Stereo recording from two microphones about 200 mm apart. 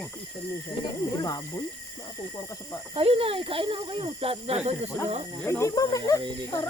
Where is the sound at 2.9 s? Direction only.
30° right (ahead or behind).